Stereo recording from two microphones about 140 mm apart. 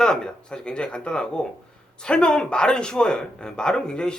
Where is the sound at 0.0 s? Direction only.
5° left (ahead or behind).